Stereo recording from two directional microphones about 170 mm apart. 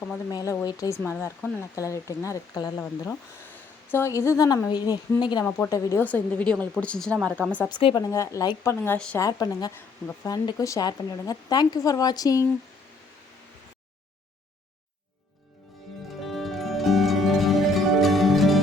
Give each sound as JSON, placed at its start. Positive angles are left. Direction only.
{"t": 0.3, "sound": "a woman's voice", "side_deg": 20}
{"t": 7.7, "sound": "a woman's voice", "side_deg": 30}
{"t": 9.1, "sound": "a woman's voice", "side_deg": 20}
{"t": 16.2, "sound": "music", "side_deg": 0}